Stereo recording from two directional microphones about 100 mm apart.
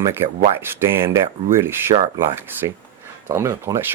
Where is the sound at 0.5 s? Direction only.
25° right (ahead or behind).